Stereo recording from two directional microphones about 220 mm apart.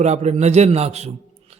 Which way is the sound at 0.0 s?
30° right (ahead or behind).